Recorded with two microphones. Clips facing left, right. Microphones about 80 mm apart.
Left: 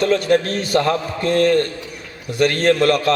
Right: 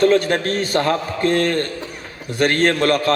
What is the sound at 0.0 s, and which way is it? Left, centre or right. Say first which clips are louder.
A man's voice: right 1 dB; right.